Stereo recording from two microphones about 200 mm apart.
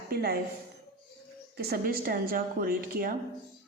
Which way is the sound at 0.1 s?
50° right (ahead or behind).